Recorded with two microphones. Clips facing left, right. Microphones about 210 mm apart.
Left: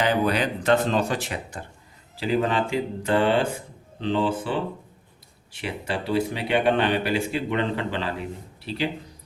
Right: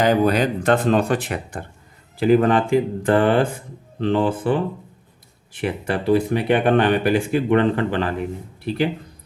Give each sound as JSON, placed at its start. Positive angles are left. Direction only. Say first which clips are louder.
{"t": 0.0, "sound": "speech", "louder": "right 5 dB", "side_deg": -45}